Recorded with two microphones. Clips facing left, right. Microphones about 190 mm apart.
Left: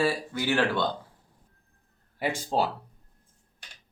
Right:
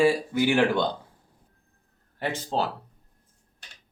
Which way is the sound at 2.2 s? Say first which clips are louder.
Left 1 dB; 10° left (ahead or behind).